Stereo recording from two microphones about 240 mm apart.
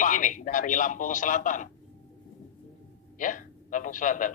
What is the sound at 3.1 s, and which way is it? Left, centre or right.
A man's voice, left.